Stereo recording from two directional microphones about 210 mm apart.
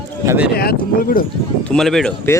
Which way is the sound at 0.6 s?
45° left (ahead or behind).